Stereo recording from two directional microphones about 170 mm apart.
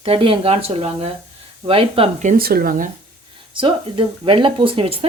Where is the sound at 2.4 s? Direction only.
60° right (ahead or behind).